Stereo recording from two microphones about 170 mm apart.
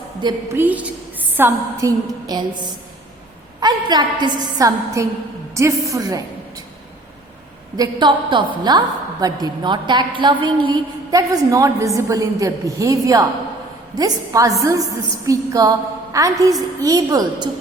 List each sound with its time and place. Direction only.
0.2 s a woman's voice: 25° right (ahead or behind)
0.5 s a woman's voice: 10° right (ahead or behind)
3.6 s a woman's voice: 25° right (ahead or behind)
7.8 s a woman's voice: 25° right (ahead or behind)